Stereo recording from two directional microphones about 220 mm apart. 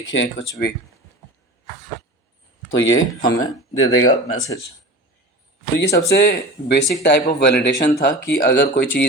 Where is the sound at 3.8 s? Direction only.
65° left (ahead or behind).